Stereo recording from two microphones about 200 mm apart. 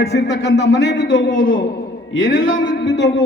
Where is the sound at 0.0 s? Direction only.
55° left (ahead or behind).